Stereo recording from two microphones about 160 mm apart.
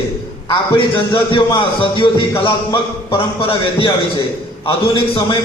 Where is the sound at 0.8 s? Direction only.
30° left (ahead or behind).